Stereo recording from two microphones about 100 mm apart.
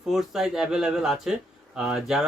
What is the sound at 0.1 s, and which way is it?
Speech, 5° right (ahead or behind).